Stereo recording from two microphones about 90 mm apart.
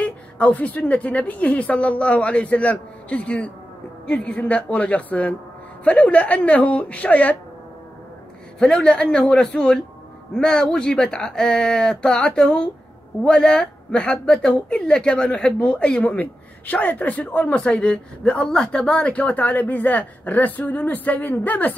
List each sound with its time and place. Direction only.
0.0 s speech: 15° left (ahead or behind)
8.5 s speech: 10° left (ahead or behind)